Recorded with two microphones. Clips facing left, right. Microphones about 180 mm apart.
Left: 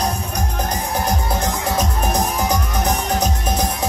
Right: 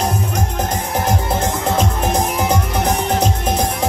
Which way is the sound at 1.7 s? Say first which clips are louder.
Right 2 dB; 25° right (ahead or behind).